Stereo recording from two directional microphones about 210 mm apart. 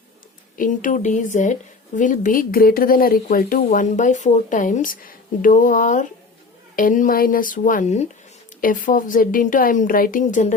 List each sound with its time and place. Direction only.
0.5 s speech: 40° left (ahead or behind)